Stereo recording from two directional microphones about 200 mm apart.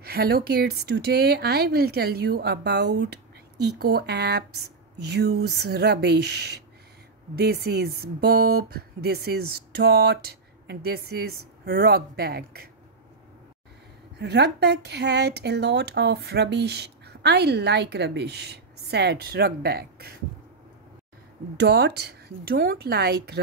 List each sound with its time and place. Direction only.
0.0 s a woman's voice: 50° right (ahead or behind)
14.1 s a woman's voice: 55° right (ahead or behind)
21.5 s speech: 60° right (ahead or behind)